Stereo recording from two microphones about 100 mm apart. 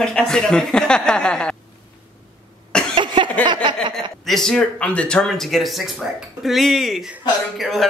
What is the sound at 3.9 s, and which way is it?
A man's voice, 5° left (ahead or behind).